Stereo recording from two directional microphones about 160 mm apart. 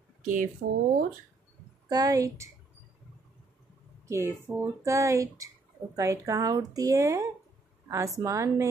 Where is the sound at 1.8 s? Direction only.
25° right (ahead or behind).